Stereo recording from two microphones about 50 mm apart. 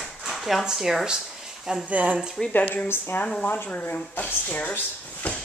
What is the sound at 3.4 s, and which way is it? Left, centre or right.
Speech, left.